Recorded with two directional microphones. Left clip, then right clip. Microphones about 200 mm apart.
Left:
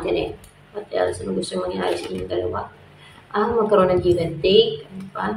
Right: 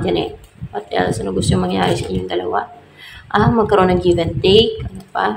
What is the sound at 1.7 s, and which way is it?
A woman's voice, 30° right (ahead or behind).